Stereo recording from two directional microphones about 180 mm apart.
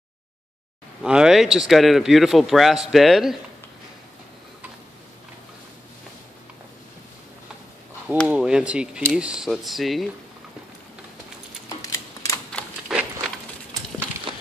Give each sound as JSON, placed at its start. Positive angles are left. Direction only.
{"t": 1.0, "sound": "speech", "side_deg": -5}
{"t": 8.3, "sound": "speech", "side_deg": -5}
{"t": 11.8, "sound": "typewriter", "side_deg": 20}
{"t": 12.5, "sound": "a sound", "side_deg": -5}